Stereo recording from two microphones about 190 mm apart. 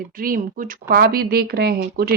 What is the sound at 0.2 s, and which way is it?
Speech, 45° right (ahead or behind).